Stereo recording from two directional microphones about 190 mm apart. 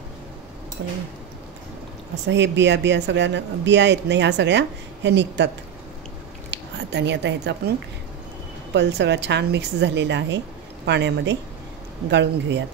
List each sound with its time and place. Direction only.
0.8 s speech: 60° right (ahead or behind)
2.2 s speech: 65° right (ahead or behind)
6.5 s speech: 65° right (ahead or behind)
8.7 s speech: 65° right (ahead or behind)